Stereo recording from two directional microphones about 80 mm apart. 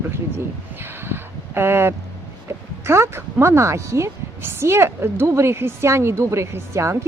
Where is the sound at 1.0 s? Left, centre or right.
Right.